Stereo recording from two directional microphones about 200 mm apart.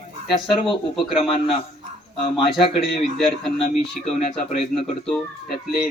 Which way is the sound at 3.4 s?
Centre (ahead or behind).